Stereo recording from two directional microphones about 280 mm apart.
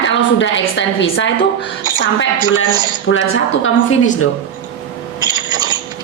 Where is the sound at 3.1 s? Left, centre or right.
Left.